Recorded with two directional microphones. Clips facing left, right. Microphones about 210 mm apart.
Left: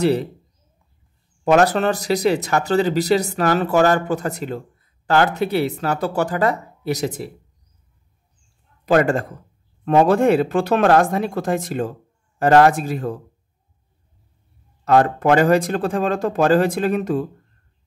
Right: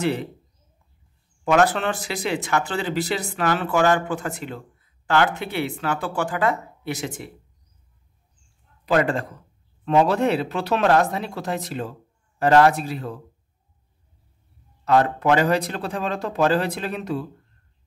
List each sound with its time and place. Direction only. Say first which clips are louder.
0.0 s speech: left 6 dB; 35° left (ahead or behind)
1.4 s speech: left 4 dB; 40° left (ahead or behind)
8.8 s speech: left 4 dB; 45° left (ahead or behind)
14.9 s speech: left 3 dB; 50° left (ahead or behind)